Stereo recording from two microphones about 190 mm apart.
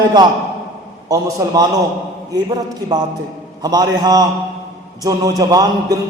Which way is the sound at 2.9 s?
20° right (ahead or behind).